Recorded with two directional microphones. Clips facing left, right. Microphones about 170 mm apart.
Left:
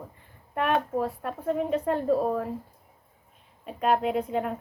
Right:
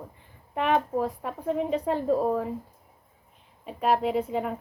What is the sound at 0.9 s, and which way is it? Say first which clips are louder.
Speech: even; 10° right (ahead or behind).